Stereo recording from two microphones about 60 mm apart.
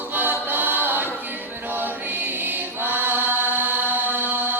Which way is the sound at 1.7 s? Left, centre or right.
Right.